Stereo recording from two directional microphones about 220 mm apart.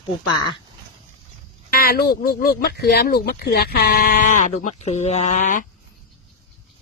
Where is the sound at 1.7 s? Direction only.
45° left (ahead or behind).